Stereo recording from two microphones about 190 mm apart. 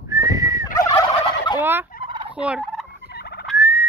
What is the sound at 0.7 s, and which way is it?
Fowl, 15° left (ahead or behind).